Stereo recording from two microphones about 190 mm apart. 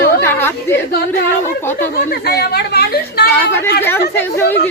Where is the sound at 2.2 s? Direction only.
55° left (ahead or behind).